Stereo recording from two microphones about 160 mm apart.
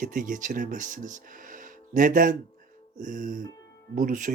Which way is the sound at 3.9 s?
55° right (ahead or behind).